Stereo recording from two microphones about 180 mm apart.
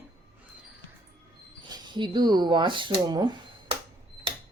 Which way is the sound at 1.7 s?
25° right (ahead or behind).